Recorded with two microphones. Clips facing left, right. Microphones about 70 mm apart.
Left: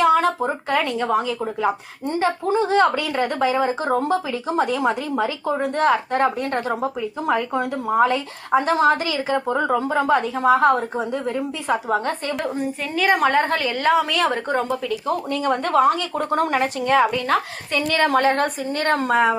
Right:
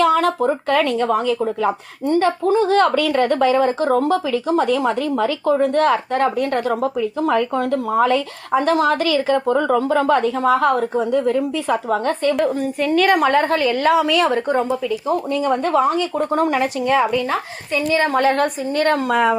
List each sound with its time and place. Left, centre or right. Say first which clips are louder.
0.0 s a sound: right 1 dB; left
0.3 s speech: right 4 dB; centre
12.8 s speech: right 5 dB; centre
13.2 s a woman's voice: right 3 dB; left
15.3 s speech: right 2 dB; left
17.2 s a woman's voice: left 1 dB; left
18.2 s a woman's voice: right 2 dB; left